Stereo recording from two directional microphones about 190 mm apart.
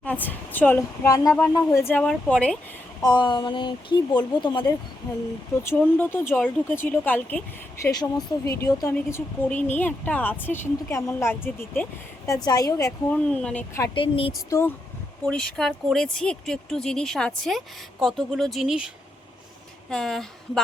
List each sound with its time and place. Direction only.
0.0 s speech: 10° left (ahead or behind)
3.0 s speech: 25° left (ahead or behind)
5.6 s speech: 10° left (ahead or behind)
13.9 s speech: 25° left (ahead or behind)
15.3 s speech: 5° left (ahead or behind)
19.9 s speech: 5° left (ahead or behind)